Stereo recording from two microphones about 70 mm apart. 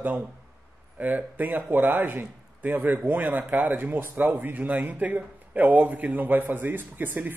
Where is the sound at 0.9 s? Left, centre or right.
Right.